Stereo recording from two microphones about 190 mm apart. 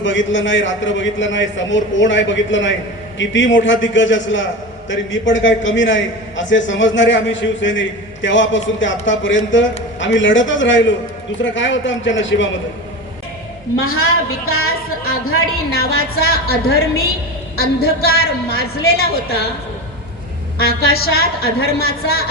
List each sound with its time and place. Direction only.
0.0 s a man's voice: 75° left (ahead or behind)
13.7 s a woman's voice: 90° left
15.7 s a woman's voice: 55° left (ahead or behind)
18.0 s a woman's voice: 55° left (ahead or behind)
20.6 s a woman's voice: 55° left (ahead or behind)